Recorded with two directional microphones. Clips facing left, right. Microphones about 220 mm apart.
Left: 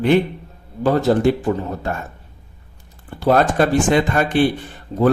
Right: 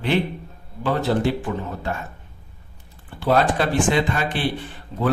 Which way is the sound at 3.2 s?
45° left (ahead or behind).